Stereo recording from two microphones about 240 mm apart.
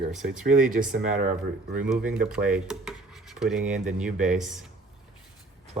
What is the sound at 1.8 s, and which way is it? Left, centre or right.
Speech, centre.